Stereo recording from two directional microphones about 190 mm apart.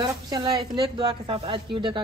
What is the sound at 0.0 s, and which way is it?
Speech, 20° right (ahead or behind).